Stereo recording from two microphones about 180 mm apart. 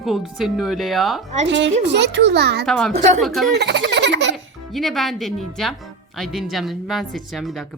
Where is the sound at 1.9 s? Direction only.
75° right (ahead or behind).